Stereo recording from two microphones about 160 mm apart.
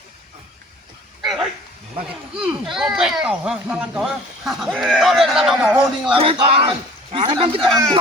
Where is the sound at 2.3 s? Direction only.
5° right (ahead or behind).